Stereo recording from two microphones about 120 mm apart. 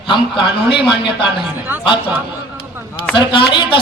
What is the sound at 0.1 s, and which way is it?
Speech, 45° left (ahead or behind).